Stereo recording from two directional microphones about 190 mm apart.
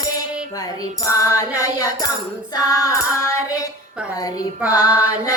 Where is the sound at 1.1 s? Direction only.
15° left (ahead or behind).